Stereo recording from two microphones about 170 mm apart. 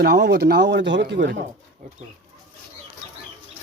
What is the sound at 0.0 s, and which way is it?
Speech, 75° right (ahead or behind).